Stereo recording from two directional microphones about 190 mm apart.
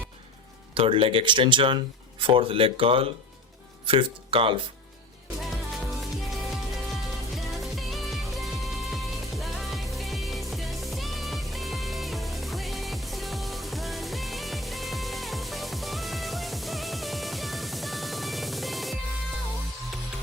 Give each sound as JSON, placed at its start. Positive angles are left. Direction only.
{"t": 0.7, "sound": "speech", "side_deg": -30}
{"t": 7.6, "sound": "music", "side_deg": 0}